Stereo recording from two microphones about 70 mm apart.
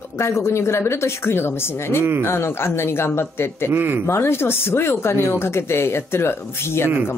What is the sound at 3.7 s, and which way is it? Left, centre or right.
Speech, right.